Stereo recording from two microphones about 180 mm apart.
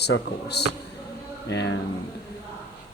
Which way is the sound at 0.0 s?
65° left (ahead or behind).